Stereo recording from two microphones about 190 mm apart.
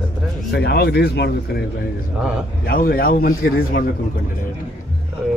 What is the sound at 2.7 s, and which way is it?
A man's voice, 50° left (ahead or behind).